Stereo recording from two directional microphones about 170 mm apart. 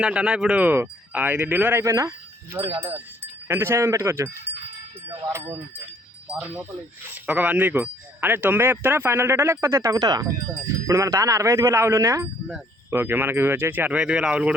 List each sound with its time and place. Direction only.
0.0 s speech: 5° right (ahead or behind)